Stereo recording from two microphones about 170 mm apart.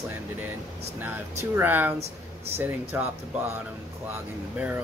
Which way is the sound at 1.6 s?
10° right (ahead or behind).